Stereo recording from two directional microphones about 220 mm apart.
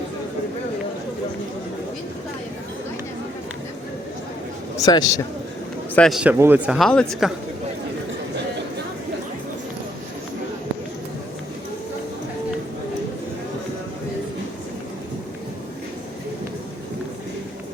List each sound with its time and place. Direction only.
4.8 s a man's voice: 15° left (ahead or behind)
5.9 s speech: centre (ahead or behind)